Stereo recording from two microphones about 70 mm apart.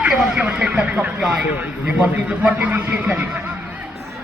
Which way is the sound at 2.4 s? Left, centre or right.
Centre.